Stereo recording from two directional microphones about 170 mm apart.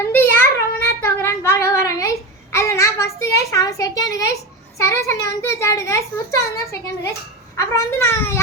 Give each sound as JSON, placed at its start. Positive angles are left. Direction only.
{"t": 0.0, "sound": "child singing", "side_deg": 15}
{"t": 4.8, "sound": "a child's voice", "side_deg": 15}